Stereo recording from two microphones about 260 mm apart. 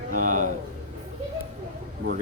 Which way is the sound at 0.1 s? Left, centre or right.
Right.